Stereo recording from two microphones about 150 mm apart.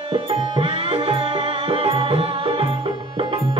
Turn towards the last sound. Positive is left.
turn(degrees=-35)  # may be behind; listen again after turning